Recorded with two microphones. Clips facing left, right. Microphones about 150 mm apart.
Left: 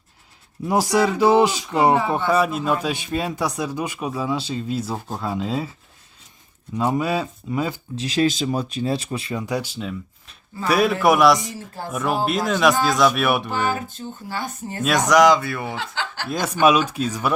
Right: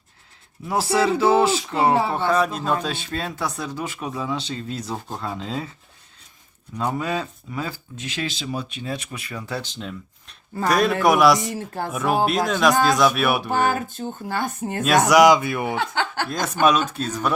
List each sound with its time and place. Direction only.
0.7 s speech: 15° left (ahead or behind)
6.7 s speech: 10° left (ahead or behind)
7.9 s speech: 35° left (ahead or behind)
9.5 s a man's voice: 10° left (ahead or behind)
11.5 s speech: 60° right (ahead or behind)
11.9 s a man's voice: centre (ahead or behind)
13.5 s speech: 50° right (ahead or behind)
15.0 s speech: 10° right (ahead or behind)
15.7 s speech: 55° right (ahead or behind)
16.3 s speech: 10° left (ahead or behind)